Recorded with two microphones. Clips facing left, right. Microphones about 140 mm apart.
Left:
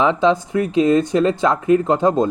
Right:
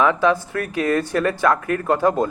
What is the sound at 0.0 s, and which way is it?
Speech, 20° left (ahead or behind).